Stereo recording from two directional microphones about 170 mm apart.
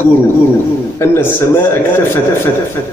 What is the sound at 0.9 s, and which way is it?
Speech, 15° left (ahead or behind).